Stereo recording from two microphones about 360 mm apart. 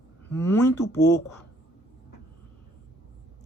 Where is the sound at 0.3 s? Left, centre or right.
Centre.